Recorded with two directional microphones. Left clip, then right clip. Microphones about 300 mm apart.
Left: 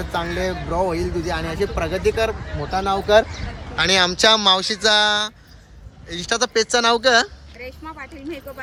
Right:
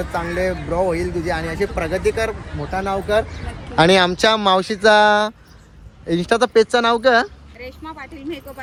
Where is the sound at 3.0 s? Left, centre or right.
Left.